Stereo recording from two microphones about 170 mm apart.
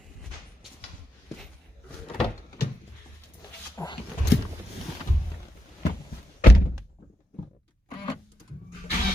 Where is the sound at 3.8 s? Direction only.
15° left (ahead or behind).